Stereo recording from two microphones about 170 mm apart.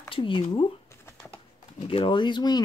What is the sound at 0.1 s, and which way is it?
Speech, 30° left (ahead or behind).